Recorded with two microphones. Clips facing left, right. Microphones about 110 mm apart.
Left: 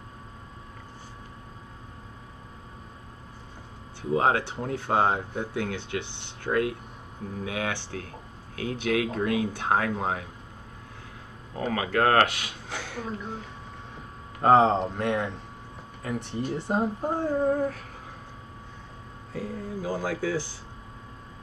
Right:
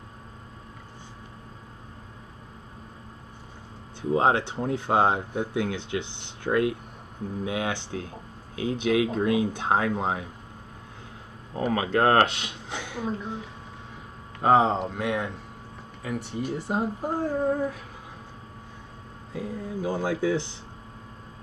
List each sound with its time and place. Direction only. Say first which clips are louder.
4.1 s speech: right 1 dB; 25° right (ahead or behind)
11.7 s speech: right 1 dB; 25° right (ahead or behind)
14.4 s speech: left 1 dB; 5° right (ahead or behind)
19.3 s speech: right 1 dB; 20° right (ahead or behind)